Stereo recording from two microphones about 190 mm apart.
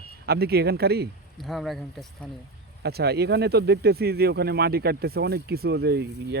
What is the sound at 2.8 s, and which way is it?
Speech, 60° right (ahead or behind).